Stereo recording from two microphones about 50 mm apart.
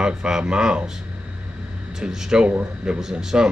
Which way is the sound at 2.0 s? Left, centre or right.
Centre.